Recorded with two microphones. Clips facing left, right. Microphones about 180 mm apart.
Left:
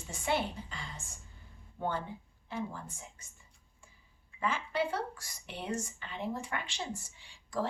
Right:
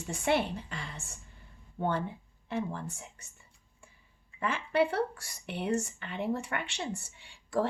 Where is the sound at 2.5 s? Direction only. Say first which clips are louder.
Right 5 dB; 65° right (ahead or behind).